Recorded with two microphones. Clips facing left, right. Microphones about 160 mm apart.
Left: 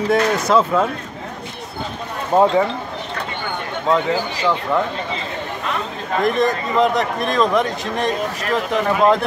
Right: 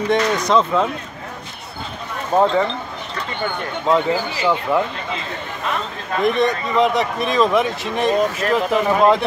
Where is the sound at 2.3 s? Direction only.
20° left (ahead or behind).